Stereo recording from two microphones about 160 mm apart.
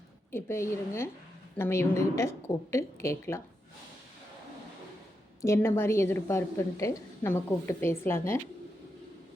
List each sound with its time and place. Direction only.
0.3 s a woman's voice: 15° left (ahead or behind)
5.4 s a woman's voice: 15° left (ahead or behind)